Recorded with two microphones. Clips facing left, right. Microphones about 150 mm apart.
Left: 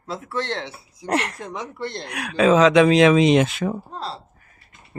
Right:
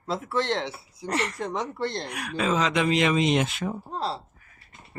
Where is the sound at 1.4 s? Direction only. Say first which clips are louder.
Right 2 dB; 30° right (ahead or behind).